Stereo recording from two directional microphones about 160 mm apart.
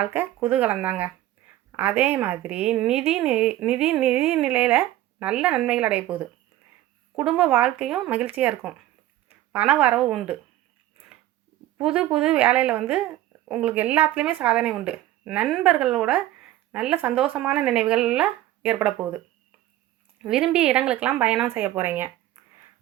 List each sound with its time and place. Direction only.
0.0 s speech: 10° right (ahead or behind)
11.8 s speech: 5° right (ahead or behind)
20.2 s speech: 5° right (ahead or behind)